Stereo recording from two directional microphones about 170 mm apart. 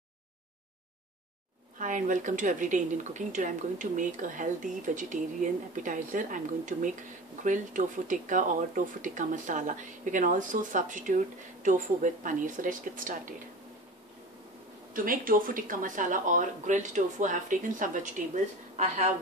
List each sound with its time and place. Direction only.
1.8 s speech: 50° right (ahead or behind)
15.0 s speech: 55° right (ahead or behind)